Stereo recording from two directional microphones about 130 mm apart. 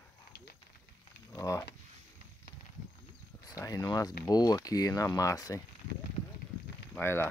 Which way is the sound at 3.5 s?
25° left (ahead or behind).